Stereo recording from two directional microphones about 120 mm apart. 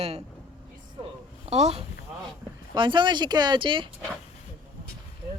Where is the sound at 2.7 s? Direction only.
40° right (ahead or behind).